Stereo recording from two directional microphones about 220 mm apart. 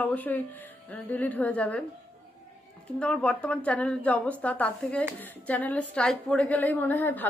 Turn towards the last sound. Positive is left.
turn(degrees=10)  # may be behind; listen again after turning